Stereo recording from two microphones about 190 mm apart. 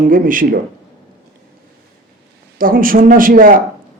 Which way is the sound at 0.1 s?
45° right (ahead or behind).